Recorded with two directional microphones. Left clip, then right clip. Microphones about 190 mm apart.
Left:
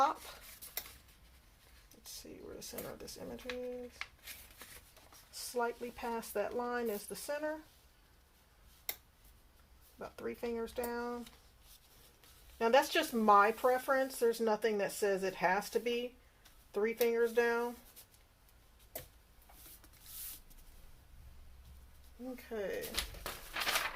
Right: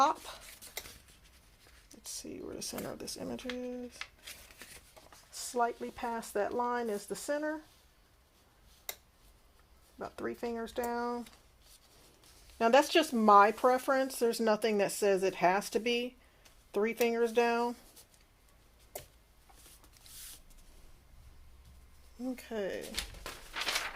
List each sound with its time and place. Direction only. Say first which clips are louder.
0.0 s a sound: right 4 dB; 60° right (ahead or behind)
2.6 s speech: right 4 dB; 60° right (ahead or behind)
5.5 s speech: right 4 dB; 40° right (ahead or behind)
10.0 s speech: right 3 dB; 40° right (ahead or behind)
12.5 s speech: right 4 dB; 50° right (ahead or behind)
22.4 s speech: right 1 dB; 55° right (ahead or behind)